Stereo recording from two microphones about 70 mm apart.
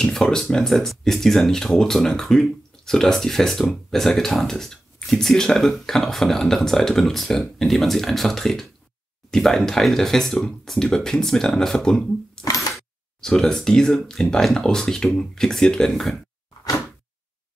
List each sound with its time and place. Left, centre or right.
0.0 s speech: centre
12.4 s crack: left
12.7 s speech: centre